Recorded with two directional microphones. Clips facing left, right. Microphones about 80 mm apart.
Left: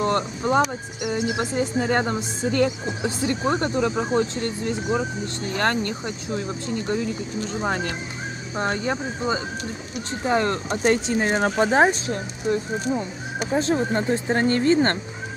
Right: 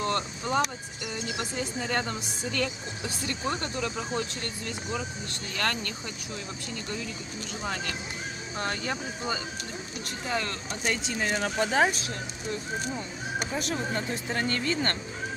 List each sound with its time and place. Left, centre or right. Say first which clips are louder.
0.0 s speech: left 7 dB; left